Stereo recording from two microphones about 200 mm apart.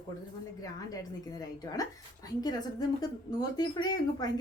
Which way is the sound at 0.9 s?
20° left (ahead or behind).